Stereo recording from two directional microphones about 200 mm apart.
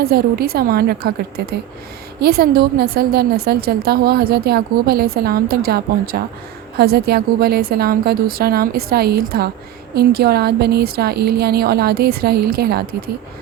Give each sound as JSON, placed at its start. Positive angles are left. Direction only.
{"t": 0.0, "sound": "a woman's voice", "side_deg": -50}